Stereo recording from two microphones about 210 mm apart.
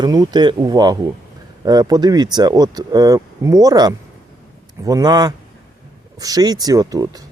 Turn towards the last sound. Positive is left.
turn(degrees=-15)  # may be behind; listen again after turning